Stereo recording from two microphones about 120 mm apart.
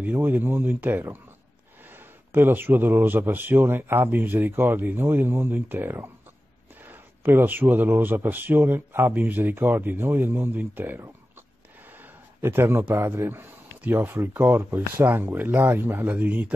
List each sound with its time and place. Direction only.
0.0 s a man's voice: 15° right (ahead or behind)